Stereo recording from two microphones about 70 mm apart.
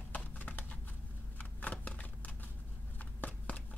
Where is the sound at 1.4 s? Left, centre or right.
Left.